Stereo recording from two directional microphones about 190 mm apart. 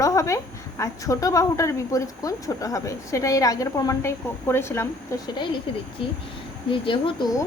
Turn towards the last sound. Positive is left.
turn(degrees=20)  # may be behind; listen again after turning